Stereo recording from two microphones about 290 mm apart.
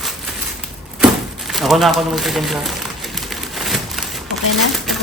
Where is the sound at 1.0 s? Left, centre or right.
Centre.